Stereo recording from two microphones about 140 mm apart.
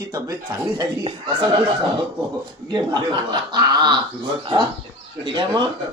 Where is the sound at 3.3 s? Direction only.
35° right (ahead or behind).